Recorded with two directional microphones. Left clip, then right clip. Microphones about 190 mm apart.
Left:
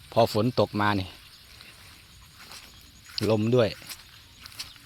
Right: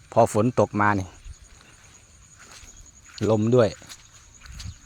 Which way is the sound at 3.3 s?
25° right (ahead or behind).